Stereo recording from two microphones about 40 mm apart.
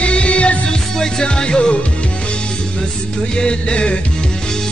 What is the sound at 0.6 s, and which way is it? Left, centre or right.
Music, centre.